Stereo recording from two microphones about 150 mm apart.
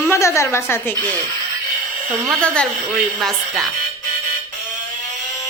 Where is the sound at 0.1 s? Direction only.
20° left (ahead or behind).